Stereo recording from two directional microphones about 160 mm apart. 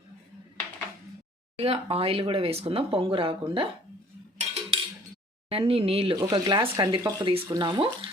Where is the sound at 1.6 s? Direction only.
35° right (ahead or behind).